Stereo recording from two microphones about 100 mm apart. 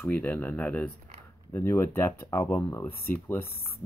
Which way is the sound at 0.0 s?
15° left (ahead or behind).